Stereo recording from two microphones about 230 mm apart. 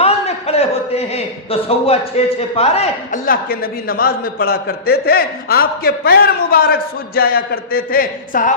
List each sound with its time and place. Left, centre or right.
0.0 s a man's voice: left